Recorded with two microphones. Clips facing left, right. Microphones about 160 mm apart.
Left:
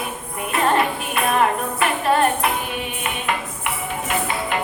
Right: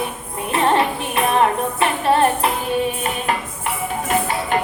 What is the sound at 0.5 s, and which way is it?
Music, 25° right (ahead or behind).